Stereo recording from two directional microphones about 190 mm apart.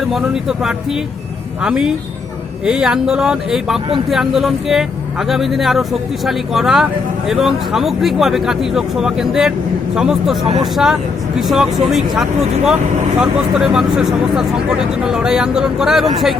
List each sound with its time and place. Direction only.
0.0 s speech: centre (ahead or behind)